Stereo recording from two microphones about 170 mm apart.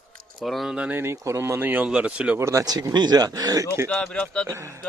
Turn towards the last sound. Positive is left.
turn(degrees=-15)  # may be behind; listen again after turning